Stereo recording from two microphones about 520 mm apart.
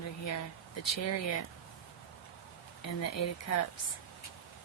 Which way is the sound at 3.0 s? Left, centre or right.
Left.